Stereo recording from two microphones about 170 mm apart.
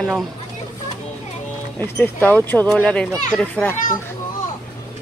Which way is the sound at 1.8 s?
10° left (ahead or behind).